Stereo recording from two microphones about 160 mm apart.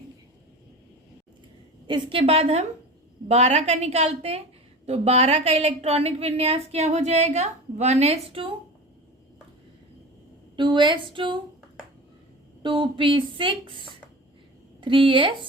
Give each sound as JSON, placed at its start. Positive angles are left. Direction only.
{"t": 1.9, "sound": "a woman's voice", "side_deg": -35}
{"t": 10.6, "sound": "a woman's voice", "side_deg": -30}
{"t": 12.6, "sound": "a woman's voice", "side_deg": -30}